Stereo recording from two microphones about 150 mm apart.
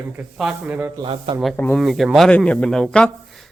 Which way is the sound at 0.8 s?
15° right (ahead or behind).